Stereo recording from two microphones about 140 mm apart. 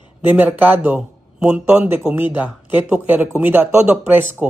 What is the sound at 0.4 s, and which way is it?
Speech, 15° right (ahead or behind).